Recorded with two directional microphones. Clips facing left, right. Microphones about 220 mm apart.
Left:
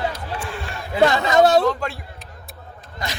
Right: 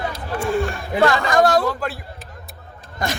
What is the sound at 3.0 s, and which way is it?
Speech, 50° right (ahead or behind).